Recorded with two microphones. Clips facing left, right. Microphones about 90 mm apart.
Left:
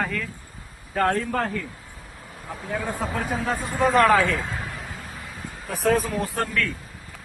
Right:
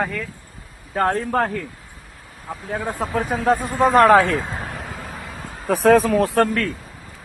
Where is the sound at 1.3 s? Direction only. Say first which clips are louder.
Right 5 dB; 40° right (ahead or behind).